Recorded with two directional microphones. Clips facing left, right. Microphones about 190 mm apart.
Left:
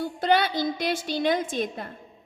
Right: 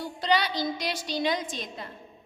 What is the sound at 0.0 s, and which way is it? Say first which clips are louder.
A woman's voice: left 4 dB; 50° left (ahead or behind).